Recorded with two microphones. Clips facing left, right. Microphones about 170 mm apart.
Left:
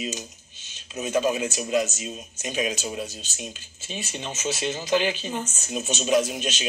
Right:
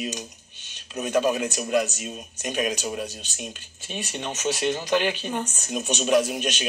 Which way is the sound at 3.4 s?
60° right (ahead or behind).